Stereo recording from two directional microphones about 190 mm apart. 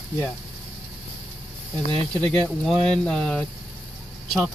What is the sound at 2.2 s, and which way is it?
Speech, 25° right (ahead or behind).